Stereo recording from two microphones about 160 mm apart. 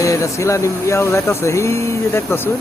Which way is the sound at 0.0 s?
20° left (ahead or behind).